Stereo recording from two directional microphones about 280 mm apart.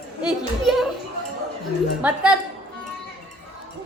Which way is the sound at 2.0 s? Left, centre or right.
Centre.